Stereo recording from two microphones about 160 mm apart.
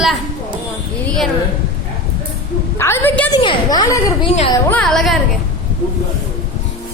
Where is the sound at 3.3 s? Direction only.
30° left (ahead or behind).